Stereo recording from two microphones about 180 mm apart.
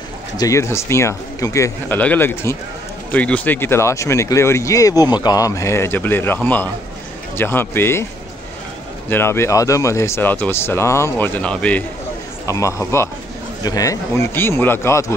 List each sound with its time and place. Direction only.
0.4 s speech: 15° left (ahead or behind)
9.1 s speech: 15° left (ahead or behind)
12.4 s speech: 15° left (ahead or behind)